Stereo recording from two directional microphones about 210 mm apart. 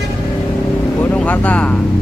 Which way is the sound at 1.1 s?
5° left (ahead or behind).